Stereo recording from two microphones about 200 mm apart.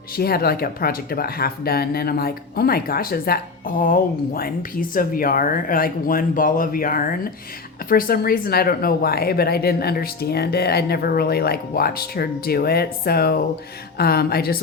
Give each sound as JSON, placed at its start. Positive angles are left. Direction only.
{"t": 0.2, "sound": "speech", "side_deg": 50}